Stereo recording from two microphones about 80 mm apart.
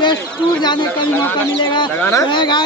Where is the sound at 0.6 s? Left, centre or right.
Left.